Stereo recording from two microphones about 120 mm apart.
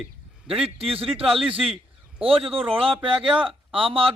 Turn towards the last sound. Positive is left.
turn(degrees=-50)  # may be behind; listen again after turning